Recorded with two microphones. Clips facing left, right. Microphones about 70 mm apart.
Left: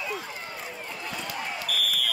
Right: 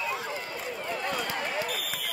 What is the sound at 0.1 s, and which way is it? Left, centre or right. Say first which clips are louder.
Run: right 2 dB; right.